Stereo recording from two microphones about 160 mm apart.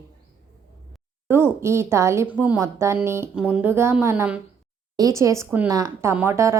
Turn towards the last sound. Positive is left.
turn(degrees=-15)  # may be behind; listen again after turning